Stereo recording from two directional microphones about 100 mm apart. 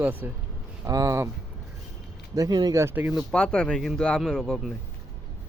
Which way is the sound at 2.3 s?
40° right (ahead or behind).